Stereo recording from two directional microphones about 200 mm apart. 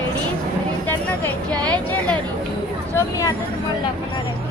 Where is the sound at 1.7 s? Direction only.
5° left (ahead or behind).